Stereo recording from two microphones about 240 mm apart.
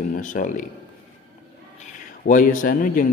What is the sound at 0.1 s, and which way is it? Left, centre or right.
Speech, left.